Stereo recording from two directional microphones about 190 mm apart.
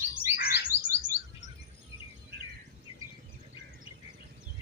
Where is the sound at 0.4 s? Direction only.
60° left (ahead or behind).